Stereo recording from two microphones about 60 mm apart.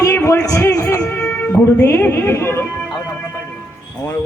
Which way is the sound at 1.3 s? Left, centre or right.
Left.